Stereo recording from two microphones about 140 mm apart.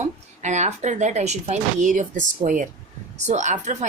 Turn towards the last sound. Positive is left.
turn(degrees=-60)  # may be behind; listen again after turning